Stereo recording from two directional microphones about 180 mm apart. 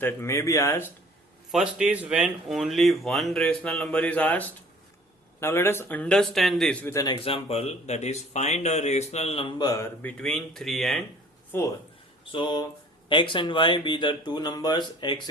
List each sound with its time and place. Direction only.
0.0 s speech: 15° left (ahead or behind)
1.5 s speech: 5° right (ahead or behind)
6.8 s speech: 20° left (ahead or behind); by 11.0 s centre (ahead or behind)
11.5 s speech: 15° left (ahead or behind)
12.3 s speech: 25° left (ahead or behind)